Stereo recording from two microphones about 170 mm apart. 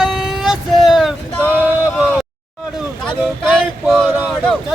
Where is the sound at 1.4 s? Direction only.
10° left (ahead or behind).